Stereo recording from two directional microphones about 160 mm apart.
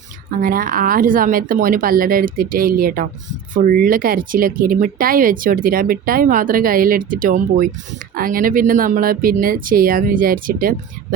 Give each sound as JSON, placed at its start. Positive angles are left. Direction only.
{"t": 0.4, "sound": "speech", "side_deg": -60}